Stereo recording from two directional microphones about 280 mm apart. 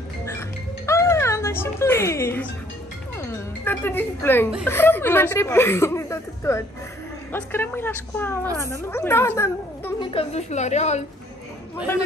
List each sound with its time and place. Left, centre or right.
0.2 s music: centre
3.2 s speech: centre
10.1 s a woman's voice: left